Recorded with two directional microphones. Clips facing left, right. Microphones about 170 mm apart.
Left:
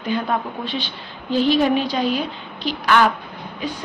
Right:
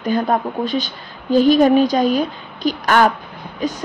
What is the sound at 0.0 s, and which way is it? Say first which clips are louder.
A woman's voice: right 4 dB; 45° right (ahead or behind).